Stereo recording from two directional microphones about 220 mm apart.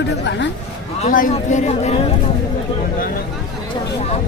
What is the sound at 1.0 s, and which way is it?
Speech, 35° left (ahead or behind).